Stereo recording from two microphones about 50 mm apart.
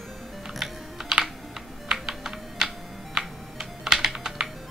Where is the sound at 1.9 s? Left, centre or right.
Centre.